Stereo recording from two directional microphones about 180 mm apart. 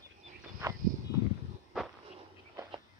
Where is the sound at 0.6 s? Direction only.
15° right (ahead or behind).